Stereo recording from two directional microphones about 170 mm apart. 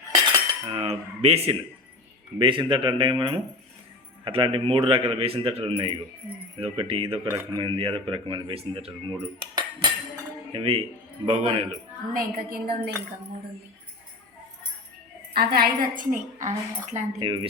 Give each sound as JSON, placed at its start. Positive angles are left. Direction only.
{"t": 0.7, "sound": "speech", "side_deg": -35}
{"t": 7.3, "sound": "speech", "side_deg": -20}
{"t": 7.8, "sound": "speech", "side_deg": -35}
{"t": 12.1, "sound": "a woman's voice", "side_deg": -55}
{"t": 15.3, "sound": "a woman's voice", "side_deg": -65}
{"t": 17.2, "sound": "speech", "side_deg": -30}